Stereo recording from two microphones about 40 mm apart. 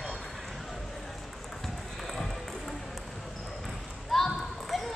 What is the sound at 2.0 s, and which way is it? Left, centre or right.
Music, centre.